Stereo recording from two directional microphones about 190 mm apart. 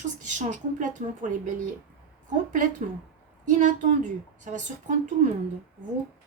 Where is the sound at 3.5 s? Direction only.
40° right (ahead or behind).